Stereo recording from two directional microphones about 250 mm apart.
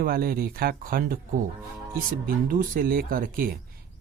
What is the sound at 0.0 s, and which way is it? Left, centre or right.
Speech, right.